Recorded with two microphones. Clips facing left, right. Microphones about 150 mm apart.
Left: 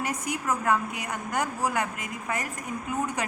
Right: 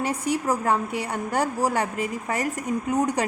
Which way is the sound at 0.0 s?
30° right (ahead or behind).